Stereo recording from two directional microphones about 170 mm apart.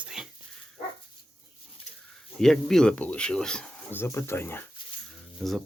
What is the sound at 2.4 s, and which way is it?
Speech, 5° left (ahead or behind).